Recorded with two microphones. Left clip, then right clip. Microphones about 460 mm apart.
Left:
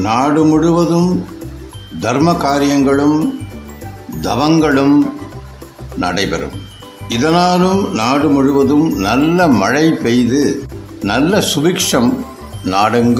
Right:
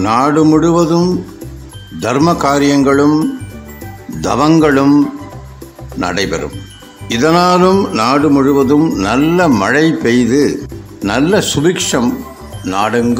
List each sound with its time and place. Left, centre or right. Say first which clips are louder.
0.0 s music: right 2 dB; left
4.2 s music: right 2 dB; left
5.9 s speech: even; left
7.1 s music: right 2 dB; left
11.1 s speech: right 1 dB; left